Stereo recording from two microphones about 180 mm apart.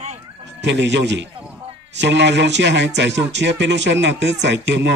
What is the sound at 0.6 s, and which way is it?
A man's voice, 75° right (ahead or behind).